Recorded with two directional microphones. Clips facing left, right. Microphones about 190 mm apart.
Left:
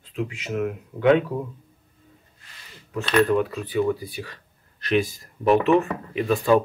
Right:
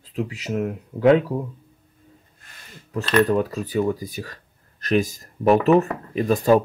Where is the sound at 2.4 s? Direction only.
50° right (ahead or behind).